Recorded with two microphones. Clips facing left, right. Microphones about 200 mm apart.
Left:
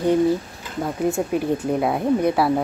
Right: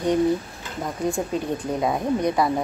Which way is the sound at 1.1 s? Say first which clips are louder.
Left 4 dB; 20° left (ahead or behind).